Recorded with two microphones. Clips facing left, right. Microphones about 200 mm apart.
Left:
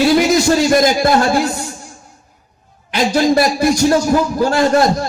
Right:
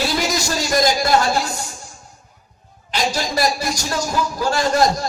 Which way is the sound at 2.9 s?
60° left (ahead or behind).